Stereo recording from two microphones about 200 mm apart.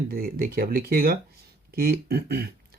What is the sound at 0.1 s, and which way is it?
Speech, 45° right (ahead or behind).